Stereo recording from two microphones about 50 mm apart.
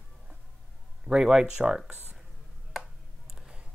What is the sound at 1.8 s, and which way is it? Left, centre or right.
Speech, right.